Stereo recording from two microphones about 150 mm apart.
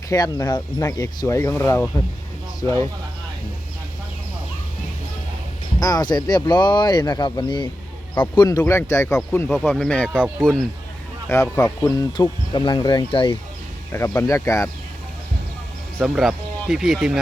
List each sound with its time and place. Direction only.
0.1 s speech: 25° left (ahead or behind)
5.8 s speech: 25° left (ahead or behind)
12.1 s speech: 30° left (ahead or behind)
13.9 s speech: 15° left (ahead or behind)
16.0 s speech: centre (ahead or behind)